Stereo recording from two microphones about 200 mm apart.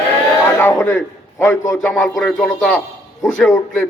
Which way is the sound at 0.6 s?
10° left (ahead or behind).